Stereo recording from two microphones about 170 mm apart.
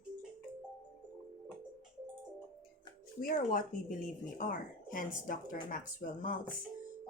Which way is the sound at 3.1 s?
55° left (ahead or behind).